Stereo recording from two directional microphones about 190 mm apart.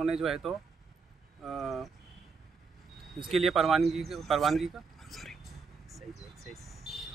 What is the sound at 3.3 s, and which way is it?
Speech, centre (ahead or behind).